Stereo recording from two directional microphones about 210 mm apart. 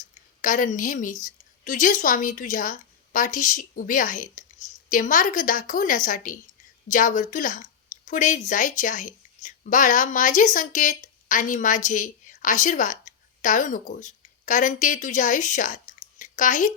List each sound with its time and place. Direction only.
0.1 s a woman's voice: 40° left (ahead or behind)